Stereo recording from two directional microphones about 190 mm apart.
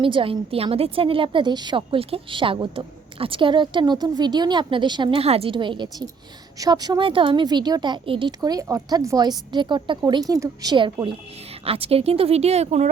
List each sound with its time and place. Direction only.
0.0 s a woman's voice: 25° right (ahead or behind)